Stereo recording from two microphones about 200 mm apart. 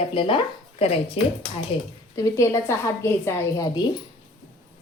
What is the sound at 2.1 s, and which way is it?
A woman's voice, 15° left (ahead or behind).